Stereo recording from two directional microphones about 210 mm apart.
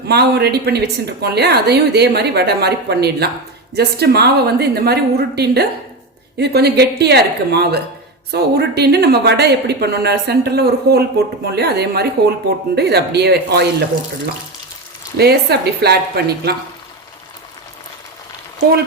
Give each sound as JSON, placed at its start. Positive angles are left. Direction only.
{"t": 0.1, "sound": "a woman's voice", "side_deg": -50}
{"t": 15.2, "sound": "a woman's voice", "side_deg": -50}